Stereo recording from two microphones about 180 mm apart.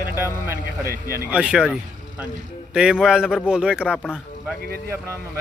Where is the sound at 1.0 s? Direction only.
20° left (ahead or behind).